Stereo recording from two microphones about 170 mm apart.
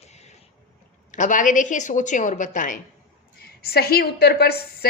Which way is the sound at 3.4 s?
65° left (ahead or behind).